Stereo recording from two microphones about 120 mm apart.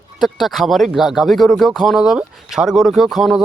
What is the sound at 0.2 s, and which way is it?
Speech, centre (ahead or behind).